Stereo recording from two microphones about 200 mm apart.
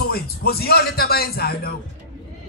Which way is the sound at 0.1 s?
50° left (ahead or behind).